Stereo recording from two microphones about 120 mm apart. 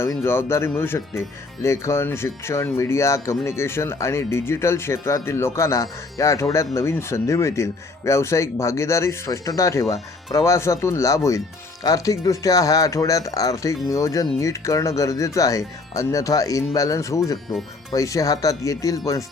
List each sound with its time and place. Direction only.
0.3 s speech: 20° left (ahead or behind)